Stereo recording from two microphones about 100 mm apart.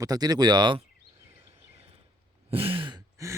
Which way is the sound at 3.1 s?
30° right (ahead or behind).